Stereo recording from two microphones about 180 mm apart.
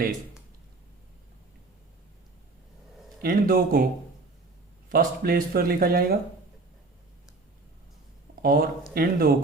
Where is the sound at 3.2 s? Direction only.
55° right (ahead or behind).